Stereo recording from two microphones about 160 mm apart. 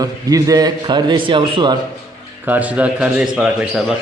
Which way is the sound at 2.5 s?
10° right (ahead or behind).